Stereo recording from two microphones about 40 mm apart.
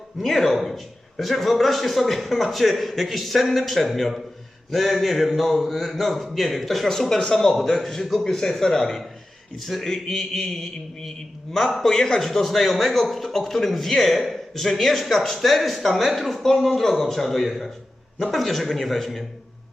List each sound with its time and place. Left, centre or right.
0.2 s a man's voice: centre
11.8 s a man's voice: centre